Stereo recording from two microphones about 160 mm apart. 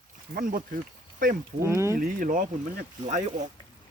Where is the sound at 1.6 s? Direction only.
15° right (ahead or behind).